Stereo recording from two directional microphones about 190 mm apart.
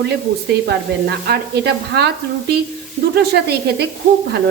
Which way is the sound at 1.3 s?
60° right (ahead or behind).